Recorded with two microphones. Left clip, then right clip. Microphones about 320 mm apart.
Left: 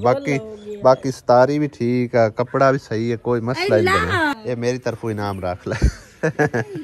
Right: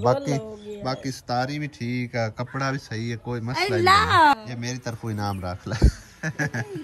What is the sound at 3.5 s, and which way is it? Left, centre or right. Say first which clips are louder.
Speech: even; right.